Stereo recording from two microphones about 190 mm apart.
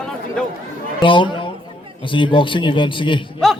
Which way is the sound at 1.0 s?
25° left (ahead or behind).